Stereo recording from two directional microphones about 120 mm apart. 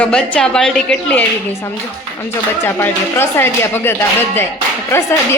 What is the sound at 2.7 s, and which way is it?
Speech, 20° left (ahead or behind).